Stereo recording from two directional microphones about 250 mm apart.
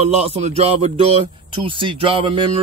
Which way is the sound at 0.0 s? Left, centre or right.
Right.